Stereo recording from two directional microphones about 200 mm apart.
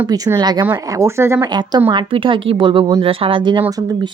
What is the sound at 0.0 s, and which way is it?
Speech, 15° right (ahead or behind).